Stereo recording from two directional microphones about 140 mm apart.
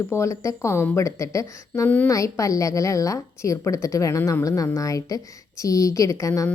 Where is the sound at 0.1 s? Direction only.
20° left (ahead or behind).